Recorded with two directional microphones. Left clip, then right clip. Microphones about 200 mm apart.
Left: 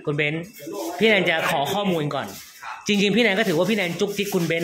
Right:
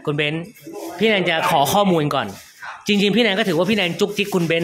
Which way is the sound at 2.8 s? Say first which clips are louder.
Right 2 dB; 15° right (ahead or behind).